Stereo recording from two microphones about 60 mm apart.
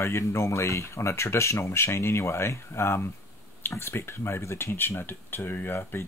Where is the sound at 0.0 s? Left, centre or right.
Left.